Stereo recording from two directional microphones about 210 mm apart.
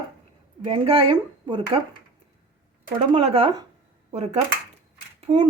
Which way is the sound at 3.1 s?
25° right (ahead or behind).